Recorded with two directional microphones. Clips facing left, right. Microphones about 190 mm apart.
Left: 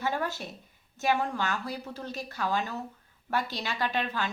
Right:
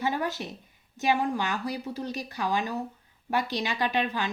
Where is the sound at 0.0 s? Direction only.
15° right (ahead or behind).